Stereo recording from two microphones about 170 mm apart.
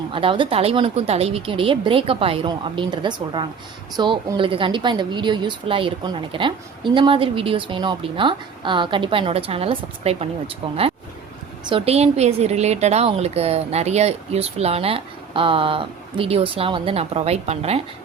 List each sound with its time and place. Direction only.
0.1 s a woman's voice: 30° right (ahead or behind)